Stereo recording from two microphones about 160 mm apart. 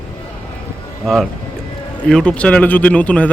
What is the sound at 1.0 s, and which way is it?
A man's voice, centre (ahead or behind).